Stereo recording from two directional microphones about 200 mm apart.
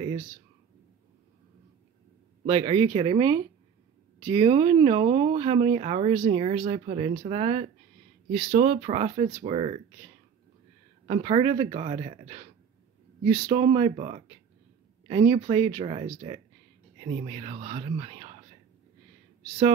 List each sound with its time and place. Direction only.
2.4 s speech: 30° right (ahead or behind)
11.1 s speech: 30° right (ahead or behind)